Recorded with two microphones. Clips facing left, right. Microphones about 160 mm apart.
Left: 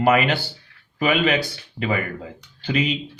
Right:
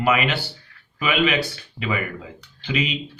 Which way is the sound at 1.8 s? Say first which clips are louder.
Left 3 dB; 10° left (ahead or behind).